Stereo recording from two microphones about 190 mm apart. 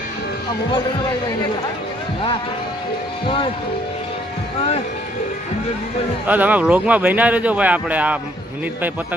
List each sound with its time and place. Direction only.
3.2 s speech: 30° left (ahead or behind)
6.2 s speech: 10° right (ahead or behind)